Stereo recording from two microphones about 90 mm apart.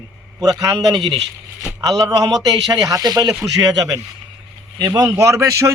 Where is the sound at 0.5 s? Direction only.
50° right (ahead or behind).